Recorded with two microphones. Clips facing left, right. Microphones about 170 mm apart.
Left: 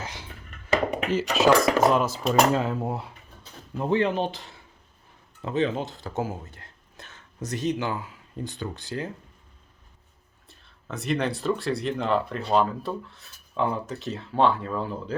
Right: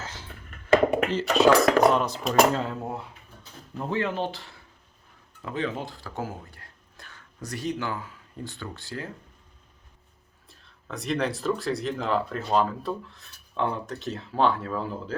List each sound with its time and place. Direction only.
0.0 s a sound: 15° left (ahead or behind)
1.1 s speech: centre (ahead or behind); by 9.0 s 20° left (ahead or behind)
10.5 s speech: centre (ahead or behind)